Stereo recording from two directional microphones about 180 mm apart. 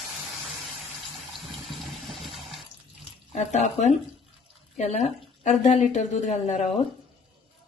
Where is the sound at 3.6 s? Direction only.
40° left (ahead or behind).